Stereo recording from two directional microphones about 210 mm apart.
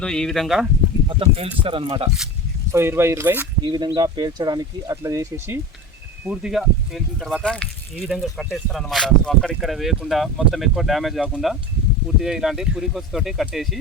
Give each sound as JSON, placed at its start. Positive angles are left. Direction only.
{"t": 0.0, "sound": "speech", "side_deg": 5}
{"t": 1.0, "sound": "speech", "side_deg": -25}
{"t": 2.7, "sound": "speech", "side_deg": -10}
{"t": 6.2, "sound": "speech", "side_deg": -5}